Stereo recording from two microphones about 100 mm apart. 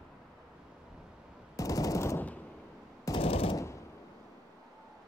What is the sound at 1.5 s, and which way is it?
Machine gun, 35° left (ahead or behind).